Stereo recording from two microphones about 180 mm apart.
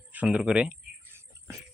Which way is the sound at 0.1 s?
5° right (ahead or behind).